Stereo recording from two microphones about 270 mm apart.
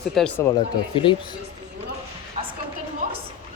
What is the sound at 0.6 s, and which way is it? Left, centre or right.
Speech, centre.